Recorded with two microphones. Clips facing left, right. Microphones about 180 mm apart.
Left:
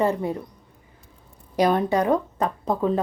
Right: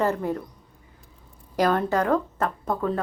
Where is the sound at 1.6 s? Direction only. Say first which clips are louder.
Left 2 dB; 15° left (ahead or behind).